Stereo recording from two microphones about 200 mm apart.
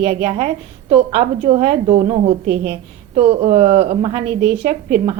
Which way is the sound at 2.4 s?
55° right (ahead or behind).